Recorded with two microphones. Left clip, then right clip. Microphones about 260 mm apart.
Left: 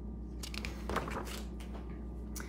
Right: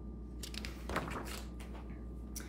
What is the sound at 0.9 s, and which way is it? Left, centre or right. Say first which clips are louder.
Thunk: left 2 dB; centre.